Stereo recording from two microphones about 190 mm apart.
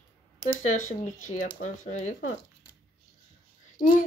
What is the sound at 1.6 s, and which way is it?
Speech, 40° left (ahead or behind).